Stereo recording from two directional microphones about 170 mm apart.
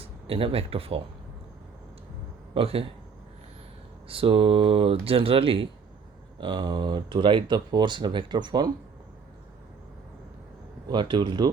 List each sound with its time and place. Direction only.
0.0 s speech: 35° right (ahead or behind)
2.6 s speech: 35° right (ahead or behind)
4.1 s speech: 30° right (ahead or behind)
10.8 s speech: 25° right (ahead or behind)